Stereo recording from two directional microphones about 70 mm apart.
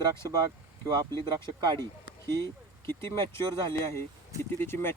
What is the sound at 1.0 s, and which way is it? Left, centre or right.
Speech, right.